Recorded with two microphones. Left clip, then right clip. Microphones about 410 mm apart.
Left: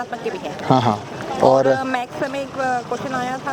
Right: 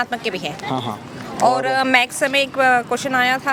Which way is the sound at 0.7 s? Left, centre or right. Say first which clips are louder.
Left 10 dB; left.